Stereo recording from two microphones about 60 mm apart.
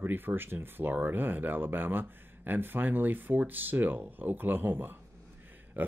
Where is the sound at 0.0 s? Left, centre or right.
Right.